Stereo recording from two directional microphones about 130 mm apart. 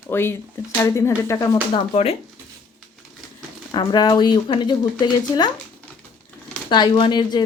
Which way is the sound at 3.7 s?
35° left (ahead or behind).